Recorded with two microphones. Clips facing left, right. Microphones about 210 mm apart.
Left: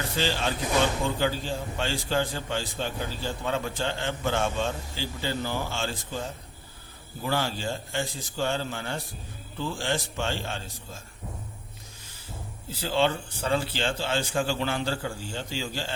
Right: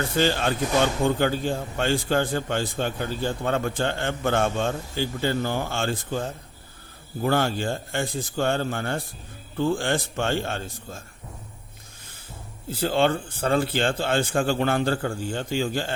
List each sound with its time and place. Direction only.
0.2 s a man's voice: 55° right (ahead or behind)
12.7 s a man's voice: 55° right (ahead or behind)